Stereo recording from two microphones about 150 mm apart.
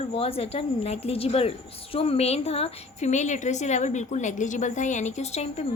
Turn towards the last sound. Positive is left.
turn(degrees=45)  # may be behind; listen again after turning